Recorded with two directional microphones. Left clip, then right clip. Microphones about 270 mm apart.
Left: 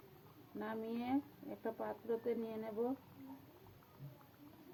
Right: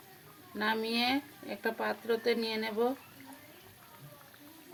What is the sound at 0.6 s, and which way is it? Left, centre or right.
Speech, right.